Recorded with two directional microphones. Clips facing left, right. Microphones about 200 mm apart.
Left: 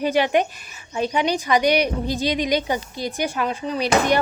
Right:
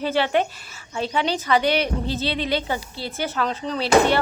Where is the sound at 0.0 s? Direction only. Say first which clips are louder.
Left 2 dB; 15° left (ahead or behind).